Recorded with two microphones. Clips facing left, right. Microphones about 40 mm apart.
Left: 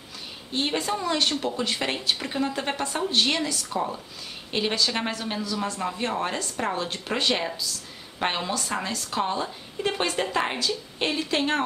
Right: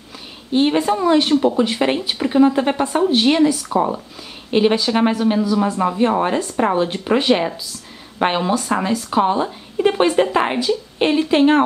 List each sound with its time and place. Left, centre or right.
0.5 s a woman's voice: centre